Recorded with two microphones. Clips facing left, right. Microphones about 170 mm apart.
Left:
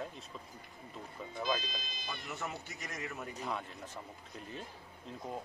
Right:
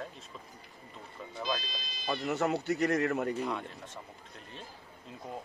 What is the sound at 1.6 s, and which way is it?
Speech, 55° left (ahead or behind).